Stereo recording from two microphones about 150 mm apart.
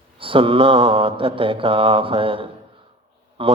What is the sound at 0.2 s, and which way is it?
A man's voice, 35° right (ahead or behind).